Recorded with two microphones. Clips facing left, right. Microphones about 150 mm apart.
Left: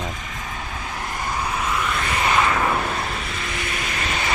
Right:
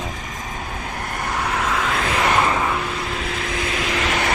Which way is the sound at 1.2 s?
70° right (ahead or behind).